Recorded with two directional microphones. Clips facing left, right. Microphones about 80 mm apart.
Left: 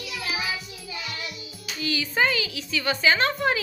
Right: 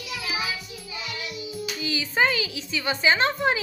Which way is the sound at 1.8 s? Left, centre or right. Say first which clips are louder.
Even; right.